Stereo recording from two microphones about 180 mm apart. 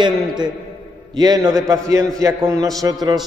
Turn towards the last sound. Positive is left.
turn(degrees=-20)  # may be behind; listen again after turning